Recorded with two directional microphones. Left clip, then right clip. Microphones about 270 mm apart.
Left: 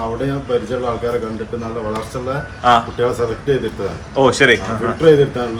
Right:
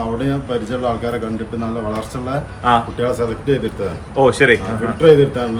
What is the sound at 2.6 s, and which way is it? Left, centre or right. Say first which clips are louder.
Speech: left 2 dB; centre.